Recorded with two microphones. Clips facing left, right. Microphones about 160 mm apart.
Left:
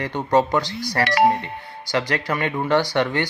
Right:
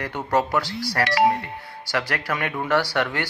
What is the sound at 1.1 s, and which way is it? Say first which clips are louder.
Speech: left 2 dB; 55° left (ahead or behind).